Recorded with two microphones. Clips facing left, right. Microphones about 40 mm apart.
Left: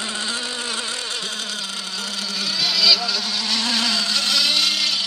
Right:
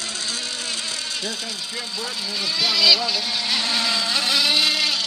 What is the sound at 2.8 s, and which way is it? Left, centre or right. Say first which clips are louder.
Motorboat: even; centre.